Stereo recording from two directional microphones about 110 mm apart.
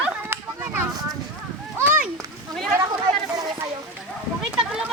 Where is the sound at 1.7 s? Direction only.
15° right (ahead or behind).